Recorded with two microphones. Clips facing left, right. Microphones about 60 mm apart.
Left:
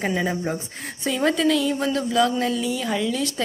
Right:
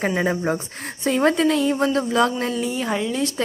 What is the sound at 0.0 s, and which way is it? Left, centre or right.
Speech, right.